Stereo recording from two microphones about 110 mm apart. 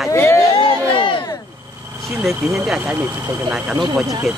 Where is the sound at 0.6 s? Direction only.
45° left (ahead or behind).